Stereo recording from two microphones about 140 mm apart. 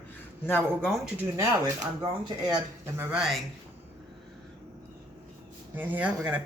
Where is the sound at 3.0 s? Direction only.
5° right (ahead or behind).